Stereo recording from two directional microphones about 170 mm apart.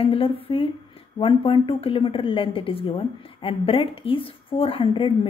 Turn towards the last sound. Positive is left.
turn(degrees=30)  # may be behind; listen again after turning